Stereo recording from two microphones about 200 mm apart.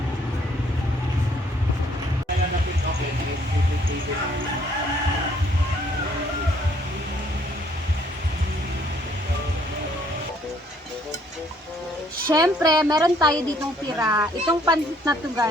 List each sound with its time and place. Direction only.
12.3 s a woman's voice: 20° right (ahead or behind)